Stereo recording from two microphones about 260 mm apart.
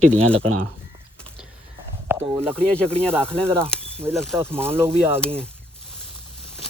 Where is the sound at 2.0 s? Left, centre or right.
Centre.